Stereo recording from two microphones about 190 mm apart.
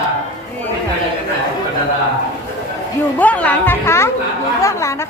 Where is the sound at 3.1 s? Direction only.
10° left (ahead or behind).